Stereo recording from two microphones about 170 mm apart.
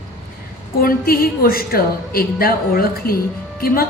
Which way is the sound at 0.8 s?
60° left (ahead or behind).